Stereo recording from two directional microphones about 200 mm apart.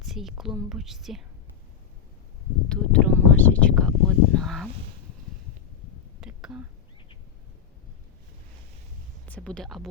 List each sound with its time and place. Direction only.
0.0 s a woman's voice: centre (ahead or behind)
2.6 s a sound: 5° left (ahead or behind)
6.1 s whispering: 5° right (ahead or behind)
9.2 s speech: 5° left (ahead or behind)